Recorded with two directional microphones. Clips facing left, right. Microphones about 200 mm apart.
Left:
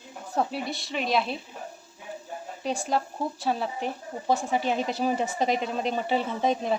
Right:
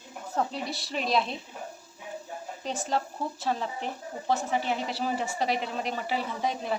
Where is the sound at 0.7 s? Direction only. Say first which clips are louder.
Left 2 dB; centre (ahead or behind).